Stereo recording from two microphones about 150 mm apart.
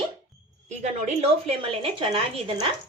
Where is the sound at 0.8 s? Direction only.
40° right (ahead or behind).